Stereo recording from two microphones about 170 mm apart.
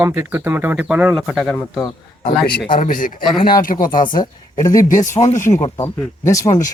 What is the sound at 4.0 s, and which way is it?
Speech, 25° left (ahead or behind).